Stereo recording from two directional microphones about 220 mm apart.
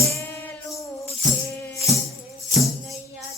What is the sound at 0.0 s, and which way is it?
Music, 15° left (ahead or behind).